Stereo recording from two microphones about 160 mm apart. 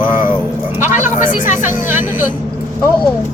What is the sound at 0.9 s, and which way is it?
Speech, 50° left (ahead or behind).